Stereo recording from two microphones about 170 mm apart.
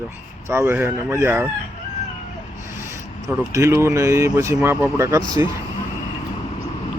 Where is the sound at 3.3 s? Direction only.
15° right (ahead or behind).